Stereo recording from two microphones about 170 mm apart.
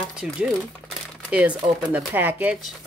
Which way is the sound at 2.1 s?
10° right (ahead or behind).